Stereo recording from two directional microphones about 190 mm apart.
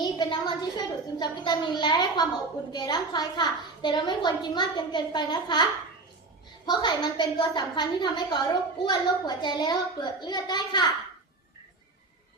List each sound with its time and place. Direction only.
0.0 s a sound: 25° left (ahead or behind)
2.7 s a woman's voice: 20° left (ahead or behind)
6.7 s a woman's voice: 20° left (ahead or behind)